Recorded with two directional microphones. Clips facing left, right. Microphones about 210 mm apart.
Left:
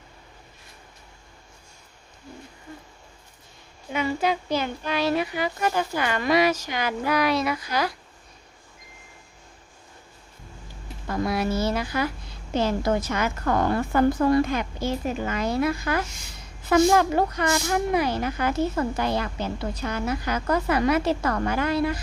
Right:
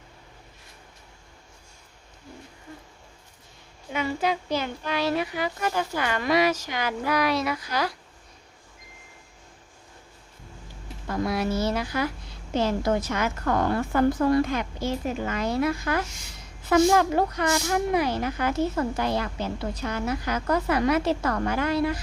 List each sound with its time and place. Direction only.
3.9 s speech: 15° left (ahead or behind)
11.0 s speech: centre (ahead or behind)